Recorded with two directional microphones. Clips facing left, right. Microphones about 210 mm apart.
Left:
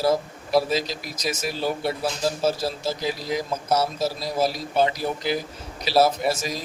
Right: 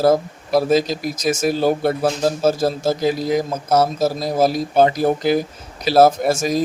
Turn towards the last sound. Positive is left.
turn(degrees=-50)  # may be behind; listen again after turning